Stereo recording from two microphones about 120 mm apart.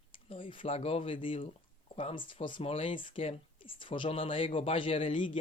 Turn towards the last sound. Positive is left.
turn(degrees=50)  # may be behind; listen again after turning